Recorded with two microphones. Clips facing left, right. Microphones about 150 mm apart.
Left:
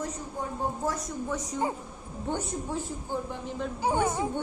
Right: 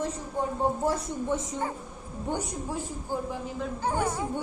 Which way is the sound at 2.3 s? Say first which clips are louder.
Even; 10° right (ahead or behind).